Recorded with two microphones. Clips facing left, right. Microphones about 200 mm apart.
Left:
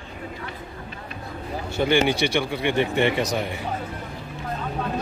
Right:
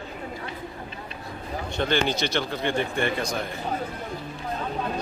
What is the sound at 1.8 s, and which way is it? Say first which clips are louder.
Speech: left 5 dB; 10° left (ahead or behind).